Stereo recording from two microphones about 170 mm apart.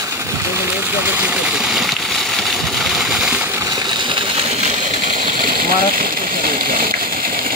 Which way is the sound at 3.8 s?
25° right (ahead or behind).